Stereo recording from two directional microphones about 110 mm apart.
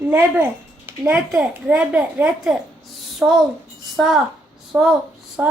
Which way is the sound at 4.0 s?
Centre (ahead or behind).